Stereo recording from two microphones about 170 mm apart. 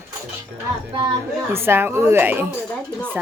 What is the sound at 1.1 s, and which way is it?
Speech, 15° right (ahead or behind).